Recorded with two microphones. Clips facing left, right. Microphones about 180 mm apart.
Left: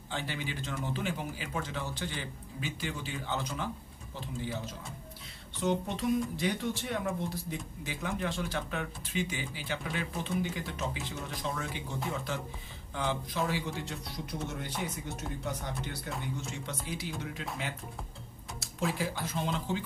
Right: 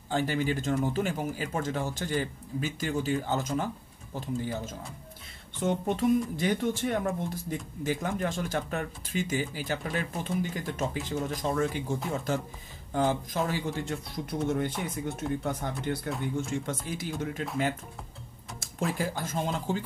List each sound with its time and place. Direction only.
0.1 s speech: 45° right (ahead or behind)
18.6 s speech: 50° right (ahead or behind)